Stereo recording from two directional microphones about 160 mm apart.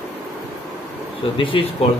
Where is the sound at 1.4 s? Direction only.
35° left (ahead or behind).